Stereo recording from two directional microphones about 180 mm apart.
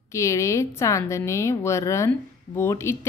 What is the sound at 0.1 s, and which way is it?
A woman's voice, 15° left (ahead or behind).